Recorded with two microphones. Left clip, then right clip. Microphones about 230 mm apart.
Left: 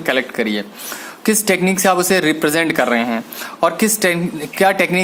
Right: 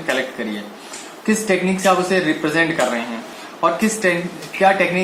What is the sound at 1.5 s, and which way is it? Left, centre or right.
Speech, left.